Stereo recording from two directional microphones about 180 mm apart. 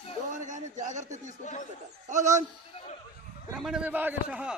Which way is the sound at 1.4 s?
45° left (ahead or behind).